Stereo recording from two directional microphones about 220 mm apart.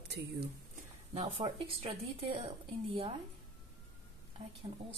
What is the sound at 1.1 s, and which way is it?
Speech, 30° right (ahead or behind).